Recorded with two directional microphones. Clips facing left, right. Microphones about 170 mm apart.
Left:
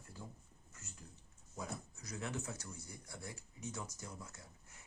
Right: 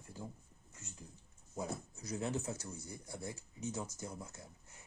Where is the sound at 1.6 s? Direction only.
25° right (ahead or behind).